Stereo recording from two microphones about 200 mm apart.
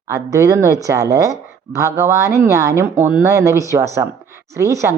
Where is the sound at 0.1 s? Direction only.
15° right (ahead or behind).